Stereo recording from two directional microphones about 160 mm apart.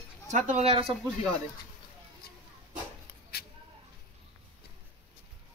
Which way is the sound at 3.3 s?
85° left.